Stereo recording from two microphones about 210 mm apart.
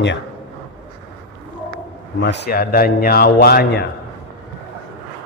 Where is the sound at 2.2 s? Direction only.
55° left (ahead or behind).